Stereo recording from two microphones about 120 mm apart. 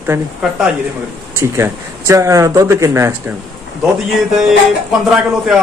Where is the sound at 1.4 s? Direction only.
25° right (ahead or behind).